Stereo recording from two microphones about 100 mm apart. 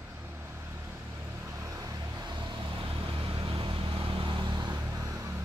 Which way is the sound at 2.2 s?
50° right (ahead or behind).